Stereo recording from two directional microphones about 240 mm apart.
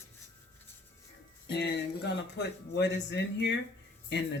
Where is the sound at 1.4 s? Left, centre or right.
Left.